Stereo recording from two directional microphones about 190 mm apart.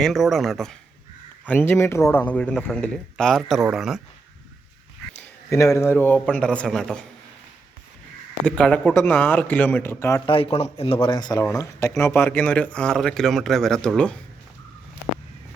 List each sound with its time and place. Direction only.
0.0 s a man's voice: centre (ahead or behind)
5.1 s a man's voice: 15° left (ahead or behind)
8.4 s speech: 5° left (ahead or behind)
10.2 s speech: 30° left (ahead or behind); by 14.2 s 5° left (ahead or behind)